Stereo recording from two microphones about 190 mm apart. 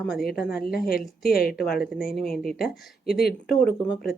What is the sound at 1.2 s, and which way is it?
Speech, 55° left (ahead or behind).